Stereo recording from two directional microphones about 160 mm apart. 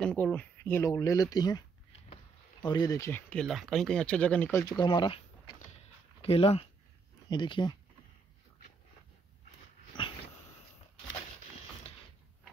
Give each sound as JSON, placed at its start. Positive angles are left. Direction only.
{"t": 0.0, "sound": "speech", "side_deg": 10}
{"t": 2.6, "sound": "speech", "side_deg": 25}
{"t": 6.2, "sound": "speech", "side_deg": 35}
{"t": 10.0, "sound": "dog", "side_deg": 30}